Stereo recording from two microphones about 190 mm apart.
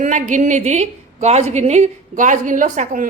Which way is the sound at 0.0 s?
40° right (ahead or behind).